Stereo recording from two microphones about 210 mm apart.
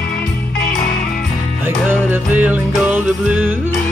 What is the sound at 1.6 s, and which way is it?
Music, 10° right (ahead or behind).